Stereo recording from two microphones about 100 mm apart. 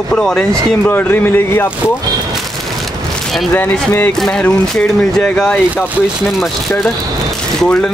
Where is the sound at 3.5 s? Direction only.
20° left (ahead or behind).